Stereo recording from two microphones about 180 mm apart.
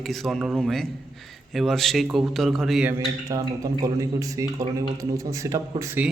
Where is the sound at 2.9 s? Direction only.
20° right (ahead or behind).